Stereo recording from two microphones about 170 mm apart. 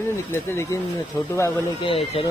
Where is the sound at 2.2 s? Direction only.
35° left (ahead or behind).